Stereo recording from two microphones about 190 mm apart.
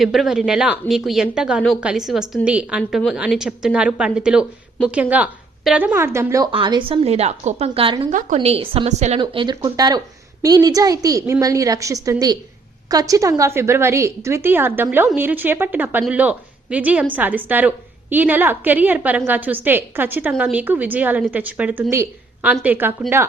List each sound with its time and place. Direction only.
0.0 s a woman's voice: centre (ahead or behind)
6.5 s a woman's voice: 25° right (ahead or behind)
9.2 s a woman's voice: 25° right (ahead or behind)